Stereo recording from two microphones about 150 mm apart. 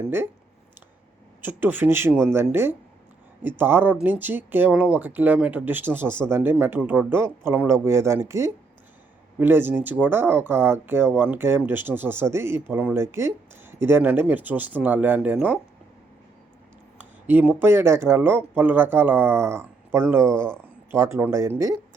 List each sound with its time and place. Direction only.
1.4 s speech: 15° right (ahead or behind)
17.0 s speech: 10° right (ahead or behind)